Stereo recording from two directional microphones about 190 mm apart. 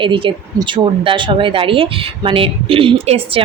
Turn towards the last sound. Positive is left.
turn(degrees=-30)  # may be behind; listen again after turning